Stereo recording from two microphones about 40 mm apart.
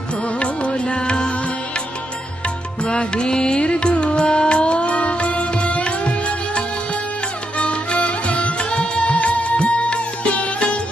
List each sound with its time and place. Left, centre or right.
0.3 s music: left
2.8 s music: left